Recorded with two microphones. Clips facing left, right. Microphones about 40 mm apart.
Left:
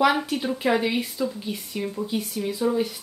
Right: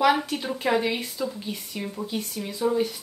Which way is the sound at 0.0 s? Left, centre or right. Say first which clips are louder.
Left 1 dB; centre.